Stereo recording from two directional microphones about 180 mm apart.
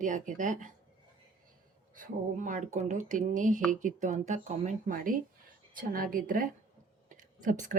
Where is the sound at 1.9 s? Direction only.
45° right (ahead or behind).